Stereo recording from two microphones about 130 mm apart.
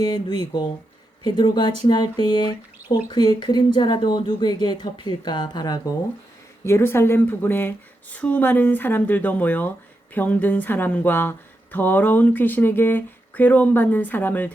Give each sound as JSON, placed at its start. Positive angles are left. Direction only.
{"t": 0.0, "sound": "speech", "side_deg": 35}
{"t": 6.7, "sound": "speech", "side_deg": 20}